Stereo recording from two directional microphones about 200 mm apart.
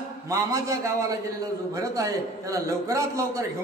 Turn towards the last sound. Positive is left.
turn(degrees=-15)  # may be behind; listen again after turning